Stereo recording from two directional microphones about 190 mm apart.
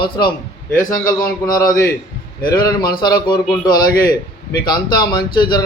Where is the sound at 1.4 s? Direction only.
20° left (ahead or behind).